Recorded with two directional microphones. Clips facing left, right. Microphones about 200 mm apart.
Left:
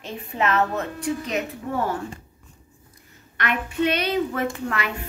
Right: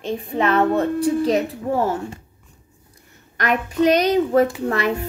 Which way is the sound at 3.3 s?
40° right (ahead or behind).